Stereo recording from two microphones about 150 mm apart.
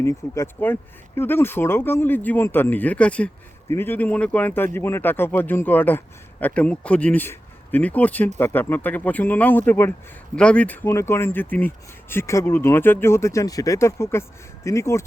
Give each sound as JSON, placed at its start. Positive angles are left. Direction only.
{"t": 0.0, "sound": "speech", "side_deg": 20}